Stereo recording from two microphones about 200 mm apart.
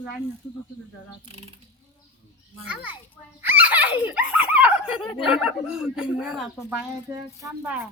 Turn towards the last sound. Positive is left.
turn(degrees=-10)  # may be behind; listen again after turning